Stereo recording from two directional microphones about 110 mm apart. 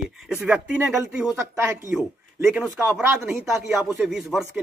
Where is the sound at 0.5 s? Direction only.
10° right (ahead or behind).